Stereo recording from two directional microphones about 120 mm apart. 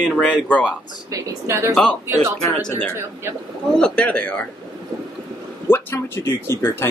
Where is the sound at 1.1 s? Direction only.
25° right (ahead or behind).